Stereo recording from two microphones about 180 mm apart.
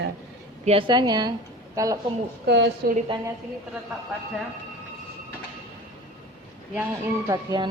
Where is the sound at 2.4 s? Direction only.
70° right (ahead or behind).